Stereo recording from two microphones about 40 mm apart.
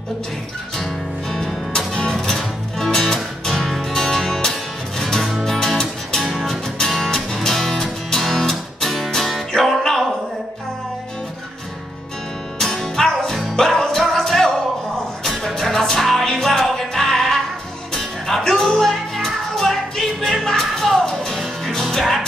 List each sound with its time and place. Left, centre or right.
1.7 s music: centre
3.9 s music: centre
5.0 s music: centre
12.5 s music: centre